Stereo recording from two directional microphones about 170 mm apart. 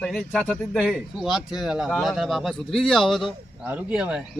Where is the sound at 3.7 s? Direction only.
10° right (ahead or behind).